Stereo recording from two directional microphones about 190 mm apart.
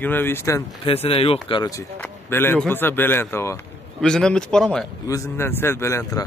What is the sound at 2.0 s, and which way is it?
Speech, 10° left (ahead or behind).